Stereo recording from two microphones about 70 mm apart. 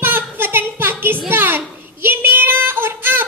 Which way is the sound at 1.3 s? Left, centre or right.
Right.